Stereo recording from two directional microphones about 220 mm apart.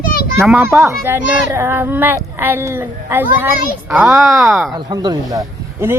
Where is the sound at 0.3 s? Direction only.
10° right (ahead or behind).